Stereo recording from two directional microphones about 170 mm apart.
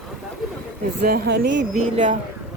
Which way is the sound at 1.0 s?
65° right (ahead or behind).